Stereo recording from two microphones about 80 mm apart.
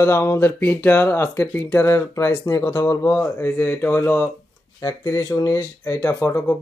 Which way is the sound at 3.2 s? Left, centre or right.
Left.